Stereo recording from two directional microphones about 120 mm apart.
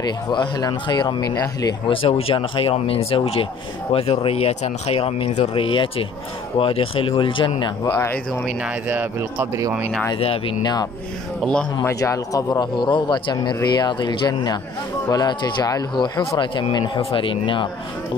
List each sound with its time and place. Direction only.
0.0 s a man's voice: 35° left (ahead or behind)
1.9 s speech: 50° left (ahead or behind)
7.8 s speech: 20° left (ahead or behind)
8.6 s speech: 15° right (ahead or behind)
10.1 s speech: 50° left (ahead or behind)
10.6 s a man's voice: 35° left (ahead or behind)
11.4 s speech: centre (ahead or behind)
11.8 s a man's voice: 25° left (ahead or behind); by 17.6 s 45° left (ahead or behind)